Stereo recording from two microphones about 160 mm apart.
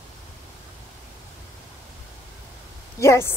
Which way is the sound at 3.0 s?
15° left (ahead or behind).